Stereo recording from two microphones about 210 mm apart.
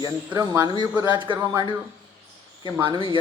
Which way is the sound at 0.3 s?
15° right (ahead or behind).